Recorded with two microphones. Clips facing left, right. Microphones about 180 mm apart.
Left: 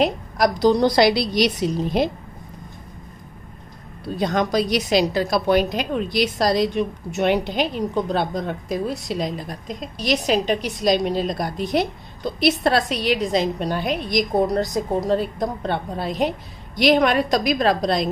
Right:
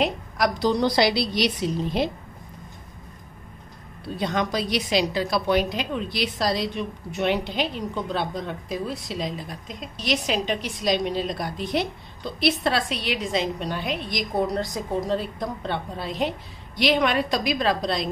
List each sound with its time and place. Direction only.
0.0 s a woman's voice: 40° left (ahead or behind)
4.2 s a woman's voice: 40° left (ahead or behind)